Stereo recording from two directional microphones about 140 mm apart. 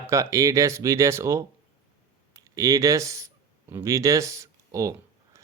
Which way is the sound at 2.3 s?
25° right (ahead or behind).